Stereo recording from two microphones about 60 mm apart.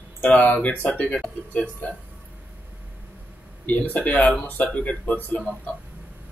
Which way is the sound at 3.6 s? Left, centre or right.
Left.